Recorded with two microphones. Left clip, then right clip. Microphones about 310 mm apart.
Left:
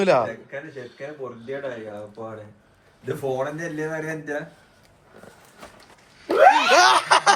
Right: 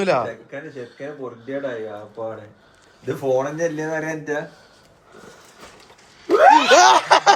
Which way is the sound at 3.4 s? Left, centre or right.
Right.